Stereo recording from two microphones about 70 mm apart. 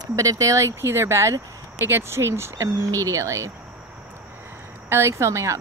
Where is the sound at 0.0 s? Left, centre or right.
Right.